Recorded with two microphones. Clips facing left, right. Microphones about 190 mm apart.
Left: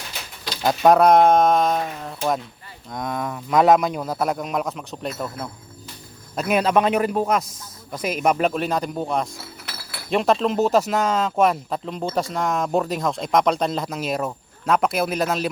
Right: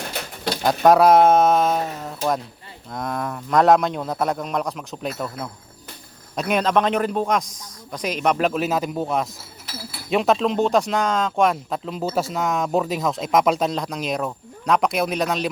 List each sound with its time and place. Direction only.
0.1 s bird: 55° right (ahead or behind)
0.6 s a man's voice: centre (ahead or behind)
9.7 s chink: 65° left (ahead or behind)
10.1 s speech: centre (ahead or behind)